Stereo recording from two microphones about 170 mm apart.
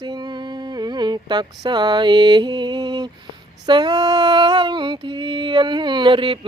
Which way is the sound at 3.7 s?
25° right (ahead or behind).